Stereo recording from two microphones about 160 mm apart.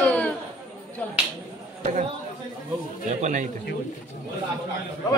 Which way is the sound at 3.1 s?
50° right (ahead or behind).